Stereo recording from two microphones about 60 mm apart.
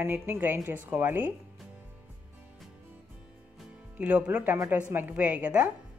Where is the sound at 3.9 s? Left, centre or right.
Right.